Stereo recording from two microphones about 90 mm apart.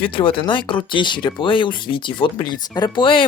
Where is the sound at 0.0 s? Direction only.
75° left (ahead or behind).